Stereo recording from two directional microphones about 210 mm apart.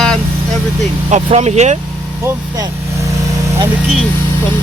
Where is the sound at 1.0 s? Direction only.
30° right (ahead or behind).